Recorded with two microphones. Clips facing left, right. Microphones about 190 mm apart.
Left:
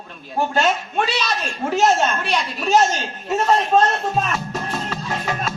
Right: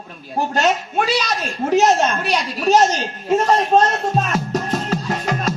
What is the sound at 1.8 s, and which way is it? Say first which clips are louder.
A man's voice: right 1 dB; 40° right (ahead or behind).